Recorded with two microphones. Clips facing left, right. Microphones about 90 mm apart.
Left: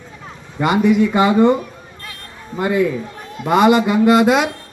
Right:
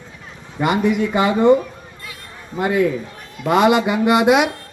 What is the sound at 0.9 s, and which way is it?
Speech, 10° right (ahead or behind).